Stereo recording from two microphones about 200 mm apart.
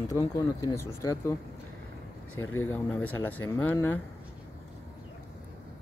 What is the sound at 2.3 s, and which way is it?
Speech, 90° left.